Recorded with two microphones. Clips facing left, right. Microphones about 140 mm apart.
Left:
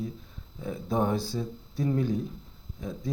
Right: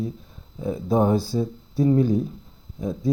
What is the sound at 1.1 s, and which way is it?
Speech, 5° right (ahead or behind).